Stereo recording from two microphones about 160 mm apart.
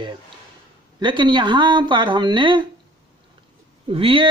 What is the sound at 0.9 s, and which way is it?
Speech, 30° right (ahead or behind).